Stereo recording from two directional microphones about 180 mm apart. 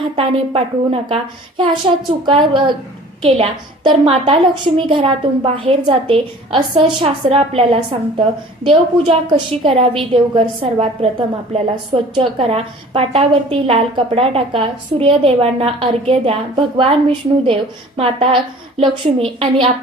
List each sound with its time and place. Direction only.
0.0 s a woman's voice: 30° right (ahead or behind)
12.1 s a woman's voice: 30° right (ahead or behind)